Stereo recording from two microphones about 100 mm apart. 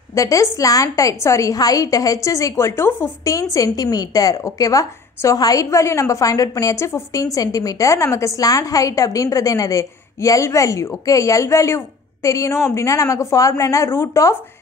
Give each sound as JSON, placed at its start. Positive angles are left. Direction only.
{"t": 0.1, "sound": "a woman's voice", "side_deg": 35}
{"t": 3.5, "sound": "a woman's voice", "side_deg": 40}